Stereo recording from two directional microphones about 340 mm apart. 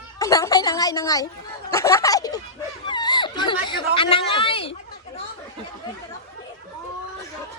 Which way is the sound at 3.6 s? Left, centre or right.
Centre.